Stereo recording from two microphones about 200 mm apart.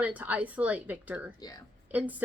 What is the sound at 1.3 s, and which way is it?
Speech, 20° left (ahead or behind).